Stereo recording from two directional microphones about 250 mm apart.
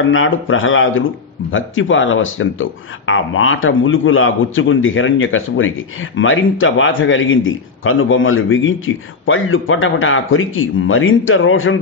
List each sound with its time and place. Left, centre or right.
0.0 s a man's voice: left